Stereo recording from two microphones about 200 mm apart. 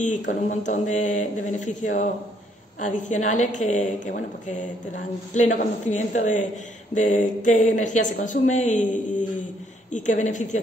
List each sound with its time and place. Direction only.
0.3 s a woman's voice: 40° left (ahead or behind)